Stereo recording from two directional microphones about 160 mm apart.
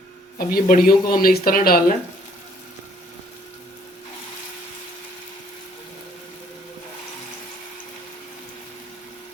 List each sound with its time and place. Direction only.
0.3 s speech: 65° left (ahead or behind)